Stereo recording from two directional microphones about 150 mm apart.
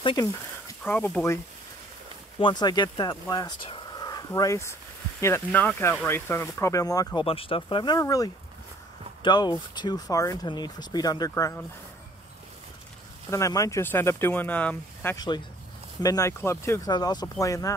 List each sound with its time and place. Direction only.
0.0 s speech: 25° left (ahead or behind)
0.8 s speech: 10° left (ahead or behind)
2.3 s speech: 30° left (ahead or behind)
7.2 s speech: 35° left (ahead or behind); by 11.6 s 20° left (ahead or behind)
13.3 s speech: 20° left (ahead or behind)
15.1 s speech: 30° left (ahead or behind)
16.9 s speech: 25° left (ahead or behind)